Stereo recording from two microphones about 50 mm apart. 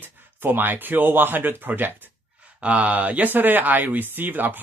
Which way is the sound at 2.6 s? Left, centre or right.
Right.